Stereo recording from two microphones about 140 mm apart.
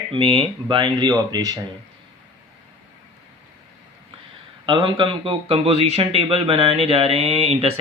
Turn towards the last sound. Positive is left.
turn(degrees=-45)  # may be behind; listen again after turning